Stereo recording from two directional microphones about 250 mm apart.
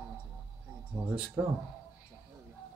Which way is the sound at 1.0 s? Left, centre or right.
Centre.